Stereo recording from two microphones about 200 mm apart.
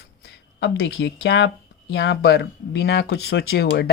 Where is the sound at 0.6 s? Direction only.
70° left (ahead or behind).